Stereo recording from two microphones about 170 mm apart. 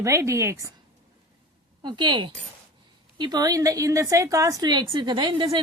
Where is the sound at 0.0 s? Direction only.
15° right (ahead or behind).